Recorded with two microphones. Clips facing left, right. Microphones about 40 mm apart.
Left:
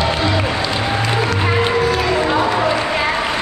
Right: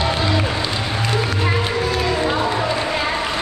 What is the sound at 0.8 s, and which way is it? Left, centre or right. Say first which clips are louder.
Music: left 3 dB; centre.